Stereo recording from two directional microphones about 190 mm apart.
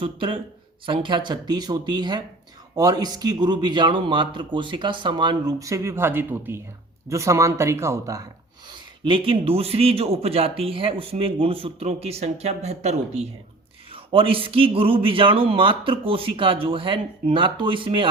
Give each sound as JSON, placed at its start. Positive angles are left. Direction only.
{"t": 0.0, "sound": "speech", "side_deg": -30}
{"t": 9.0, "sound": "speech", "side_deg": -25}